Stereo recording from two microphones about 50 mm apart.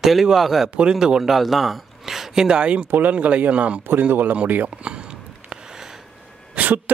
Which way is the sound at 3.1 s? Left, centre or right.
Right.